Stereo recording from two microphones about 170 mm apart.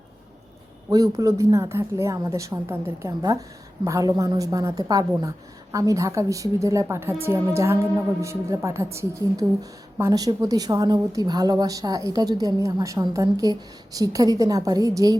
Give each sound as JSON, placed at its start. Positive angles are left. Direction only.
{"t": 0.9, "sound": "a woman's voice", "side_deg": -20}